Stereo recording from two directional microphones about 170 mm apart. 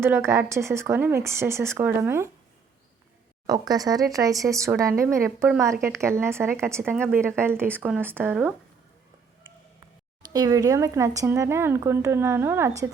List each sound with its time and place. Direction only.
0.0 s a woman's voice: 15° right (ahead or behind)
3.4 s a woman's voice: 20° right (ahead or behind)
10.3 s a woman's voice: 20° right (ahead or behind)